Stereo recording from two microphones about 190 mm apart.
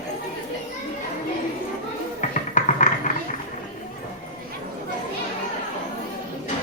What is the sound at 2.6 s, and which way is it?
Music, 40° left (ahead or behind).